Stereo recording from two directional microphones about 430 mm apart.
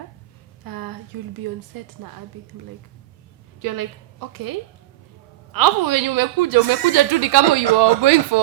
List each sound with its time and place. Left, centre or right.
0.6 s a sound: right
2.0 s a woman's voice: right
3.6 s a woman's voice: right